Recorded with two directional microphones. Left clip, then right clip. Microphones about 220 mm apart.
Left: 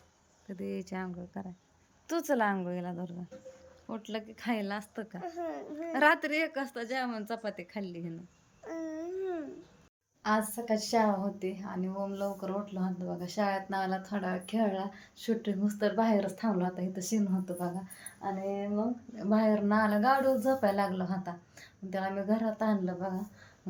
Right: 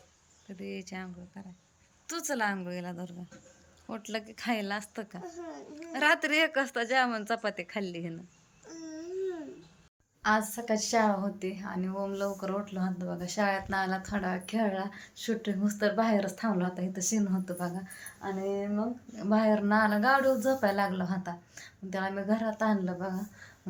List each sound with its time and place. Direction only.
0.4 s a woman's voice: 15° left (ahead or behind)
8.6 s babbling: 30° left (ahead or behind)
10.2 s a woman's voice: centre (ahead or behind)